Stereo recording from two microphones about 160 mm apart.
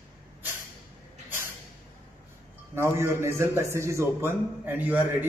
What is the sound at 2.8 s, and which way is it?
A man's voice, 15° right (ahead or behind).